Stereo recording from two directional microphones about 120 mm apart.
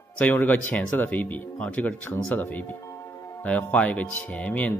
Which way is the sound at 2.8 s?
25° left (ahead or behind).